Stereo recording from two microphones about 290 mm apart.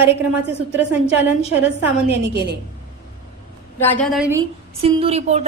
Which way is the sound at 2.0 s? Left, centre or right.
Right.